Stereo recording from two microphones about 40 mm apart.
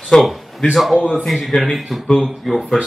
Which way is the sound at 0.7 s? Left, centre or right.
Centre.